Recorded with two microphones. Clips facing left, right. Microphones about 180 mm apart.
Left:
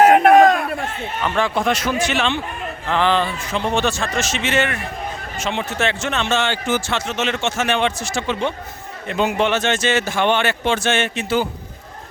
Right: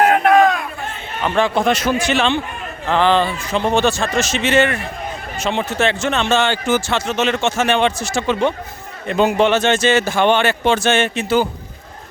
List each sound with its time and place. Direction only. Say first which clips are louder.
0.0 s crowd: left 2 dB; 45° left (ahead or behind)
1.2 s a man's voice: right 4 dB; 25° right (ahead or behind)